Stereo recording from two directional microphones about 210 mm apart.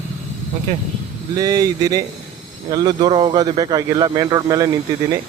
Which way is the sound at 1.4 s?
15° right (ahead or behind).